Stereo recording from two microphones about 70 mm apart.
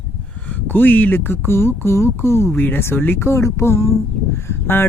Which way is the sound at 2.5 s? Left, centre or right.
Left.